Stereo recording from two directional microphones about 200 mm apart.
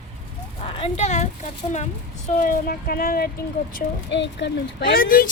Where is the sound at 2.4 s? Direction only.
45° left (ahead or behind).